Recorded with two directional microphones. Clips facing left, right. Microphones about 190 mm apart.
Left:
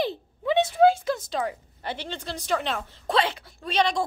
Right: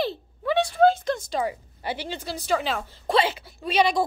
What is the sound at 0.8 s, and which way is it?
A woman's voice, 10° left (ahead or behind).